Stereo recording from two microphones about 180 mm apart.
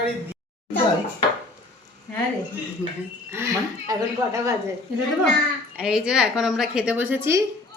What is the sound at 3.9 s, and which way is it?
Speech, 15° right (ahead or behind).